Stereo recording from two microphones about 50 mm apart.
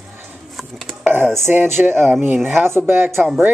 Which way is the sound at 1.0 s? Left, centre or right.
Right.